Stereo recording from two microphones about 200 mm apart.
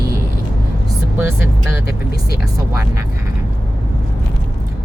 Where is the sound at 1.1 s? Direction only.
10° right (ahead or behind).